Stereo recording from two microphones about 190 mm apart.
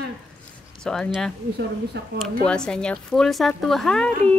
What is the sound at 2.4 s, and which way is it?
A woman's voice, 5° left (ahead or behind).